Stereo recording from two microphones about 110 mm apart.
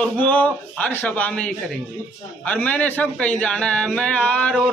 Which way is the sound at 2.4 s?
15° left (ahead or behind).